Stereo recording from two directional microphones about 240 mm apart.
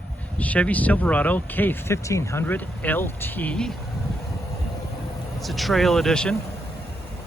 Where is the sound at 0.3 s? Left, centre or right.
Centre.